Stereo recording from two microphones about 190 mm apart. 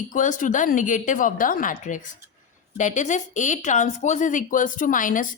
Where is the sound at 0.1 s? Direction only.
45° left (ahead or behind).